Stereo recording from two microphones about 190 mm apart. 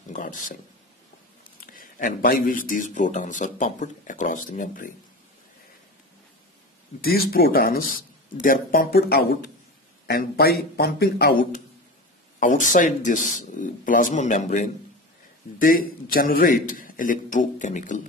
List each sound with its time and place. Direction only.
0.1 s speech: 45° left (ahead or behind)
7.0 s speech: 50° left (ahead or behind)
12.4 s speech: 45° left (ahead or behind)
16.1 s speech: 50° left (ahead or behind)